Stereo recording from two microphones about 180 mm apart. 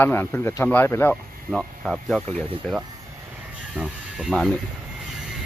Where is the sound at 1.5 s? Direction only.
5° right (ahead or behind).